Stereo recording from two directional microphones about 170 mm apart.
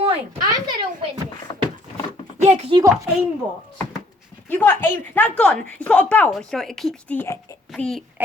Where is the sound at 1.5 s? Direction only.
25° left (ahead or behind).